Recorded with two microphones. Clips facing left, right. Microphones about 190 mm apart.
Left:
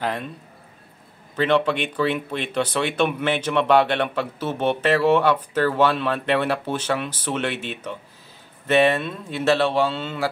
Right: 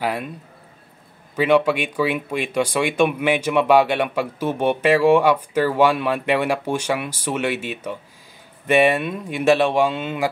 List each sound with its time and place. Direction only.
0.0 s speech: 10° right (ahead or behind)
1.3 s speech: 10° right (ahead or behind)